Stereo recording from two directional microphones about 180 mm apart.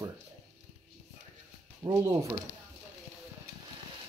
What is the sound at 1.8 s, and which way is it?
Speech, 20° right (ahead or behind).